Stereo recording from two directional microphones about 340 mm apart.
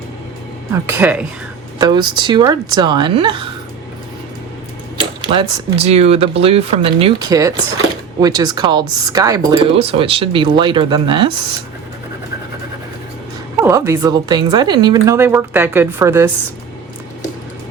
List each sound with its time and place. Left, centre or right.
0.9 s speech: centre
4.9 s speech: centre
13.6 s speech: centre